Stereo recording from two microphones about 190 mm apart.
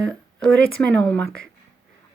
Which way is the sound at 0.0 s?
5° left (ahead or behind).